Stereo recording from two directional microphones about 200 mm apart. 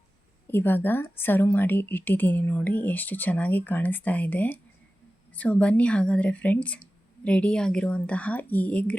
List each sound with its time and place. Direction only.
0.4 s speech: 10° left (ahead or behind)